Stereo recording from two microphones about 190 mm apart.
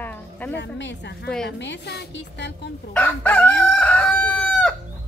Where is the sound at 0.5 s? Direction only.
65° left (ahead or behind).